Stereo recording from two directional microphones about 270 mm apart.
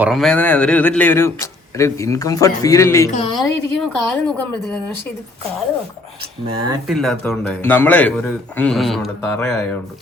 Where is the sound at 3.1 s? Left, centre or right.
Left.